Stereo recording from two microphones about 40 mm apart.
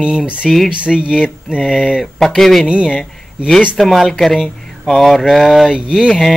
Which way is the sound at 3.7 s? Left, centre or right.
Centre.